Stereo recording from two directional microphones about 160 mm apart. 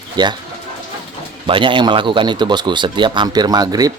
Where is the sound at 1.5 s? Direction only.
30° right (ahead or behind).